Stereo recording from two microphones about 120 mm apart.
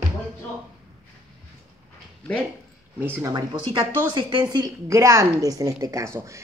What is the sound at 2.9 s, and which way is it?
Speech, 20° right (ahead or behind).